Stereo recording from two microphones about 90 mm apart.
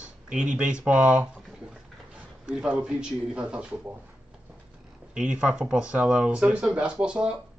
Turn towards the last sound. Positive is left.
turn(degrees=-10)  # may be behind; listen again after turning